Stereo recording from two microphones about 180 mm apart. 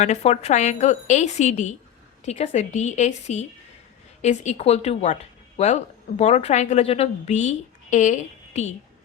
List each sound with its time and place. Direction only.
0.0 s a woman's voice: 40° left (ahead or behind)